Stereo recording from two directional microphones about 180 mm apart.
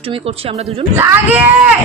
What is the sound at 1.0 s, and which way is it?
Speech, 10° right (ahead or behind).